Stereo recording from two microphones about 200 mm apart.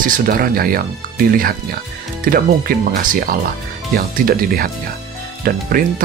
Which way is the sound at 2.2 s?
45° right (ahead or behind).